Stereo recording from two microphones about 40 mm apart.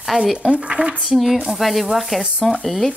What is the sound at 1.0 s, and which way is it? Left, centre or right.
A woman's voice, centre.